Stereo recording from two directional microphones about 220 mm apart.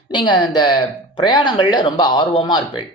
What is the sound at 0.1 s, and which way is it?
Speech, 20° left (ahead or behind).